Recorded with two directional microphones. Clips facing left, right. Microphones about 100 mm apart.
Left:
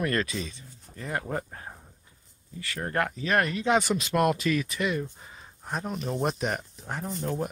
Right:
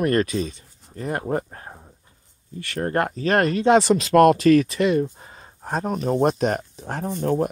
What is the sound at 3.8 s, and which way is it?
Speech, 80° right.